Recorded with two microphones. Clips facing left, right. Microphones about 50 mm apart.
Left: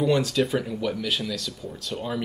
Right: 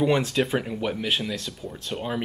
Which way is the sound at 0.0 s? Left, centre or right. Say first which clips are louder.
Even; right.